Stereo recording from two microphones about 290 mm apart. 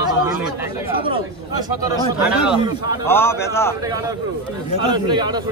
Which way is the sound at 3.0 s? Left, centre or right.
Centre.